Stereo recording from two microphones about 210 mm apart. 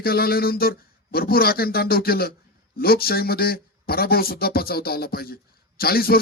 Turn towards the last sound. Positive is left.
turn(degrees=45)  # may be behind; listen again after turning